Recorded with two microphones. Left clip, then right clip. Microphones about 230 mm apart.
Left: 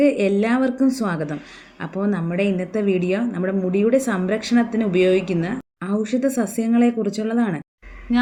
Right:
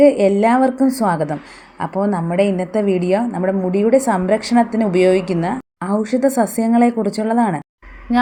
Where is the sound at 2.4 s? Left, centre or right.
Centre.